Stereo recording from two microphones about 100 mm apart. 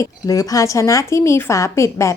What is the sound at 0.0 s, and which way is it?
Speech, 35° left (ahead or behind).